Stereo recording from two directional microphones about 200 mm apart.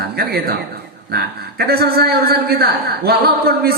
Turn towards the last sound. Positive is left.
turn(degrees=-50)  # may be behind; listen again after turning